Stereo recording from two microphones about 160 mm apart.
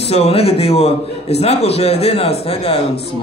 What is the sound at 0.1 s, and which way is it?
Speech, 40° left (ahead or behind).